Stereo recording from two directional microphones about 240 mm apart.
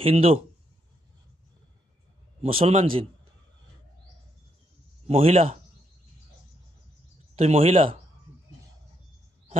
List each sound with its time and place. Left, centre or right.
0.0 s a man's voice: right
2.4 s a man's voice: right
5.0 s a man's voice: right
7.3 s a man's voice: right